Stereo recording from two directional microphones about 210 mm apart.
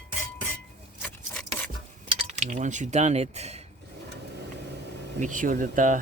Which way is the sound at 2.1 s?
35° right (ahead or behind).